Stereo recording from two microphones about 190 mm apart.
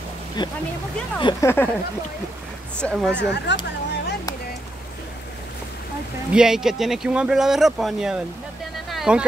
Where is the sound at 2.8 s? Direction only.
Centre (ahead or behind).